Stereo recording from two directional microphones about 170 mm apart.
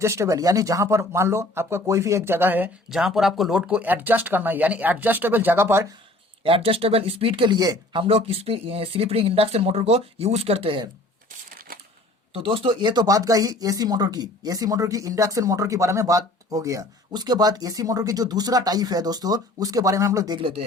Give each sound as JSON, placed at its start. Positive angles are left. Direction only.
{"t": 0.0, "sound": "speech", "side_deg": -15}
{"t": 6.4, "sound": "speech", "side_deg": -35}
{"t": 8.0, "sound": "speech", "side_deg": -35}
{"t": 11.7, "sound": "typewriter", "side_deg": -55}
{"t": 12.3, "sound": "speech", "side_deg": -30}